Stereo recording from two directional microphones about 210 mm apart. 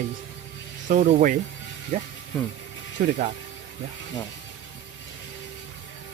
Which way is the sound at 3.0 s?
40° right (ahead or behind).